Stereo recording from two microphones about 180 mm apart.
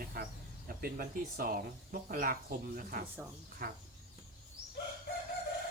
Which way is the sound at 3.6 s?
55° right (ahead or behind).